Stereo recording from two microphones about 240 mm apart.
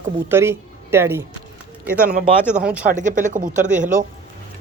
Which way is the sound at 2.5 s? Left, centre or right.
Centre.